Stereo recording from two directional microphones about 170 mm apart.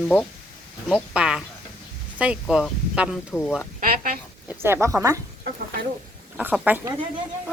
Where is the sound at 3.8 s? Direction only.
60° right (ahead or behind).